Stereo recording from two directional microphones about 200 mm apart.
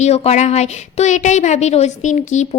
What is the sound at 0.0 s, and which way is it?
A woman's voice, 35° left (ahead or behind).